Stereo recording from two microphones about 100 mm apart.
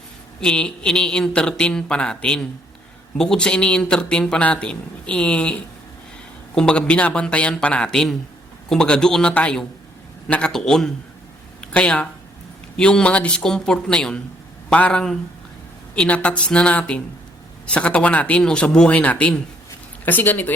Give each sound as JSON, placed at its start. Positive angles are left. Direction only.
{"t": 0.3, "sound": "a man's voice", "side_deg": 10}